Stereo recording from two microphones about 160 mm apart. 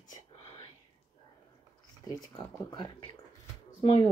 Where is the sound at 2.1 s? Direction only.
25° left (ahead or behind).